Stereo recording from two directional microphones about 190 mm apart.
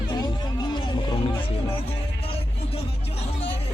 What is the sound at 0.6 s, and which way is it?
Music, 25° left (ahead or behind).